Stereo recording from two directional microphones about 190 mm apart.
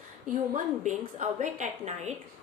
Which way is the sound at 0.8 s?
40° right (ahead or behind).